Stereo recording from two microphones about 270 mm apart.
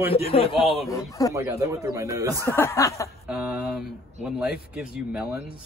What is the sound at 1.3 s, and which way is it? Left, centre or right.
A man's voice, centre.